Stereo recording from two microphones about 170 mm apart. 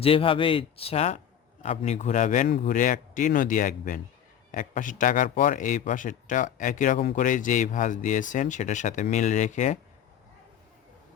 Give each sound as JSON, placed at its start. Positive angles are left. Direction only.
{"t": 0.0, "sound": "speech", "side_deg": 30}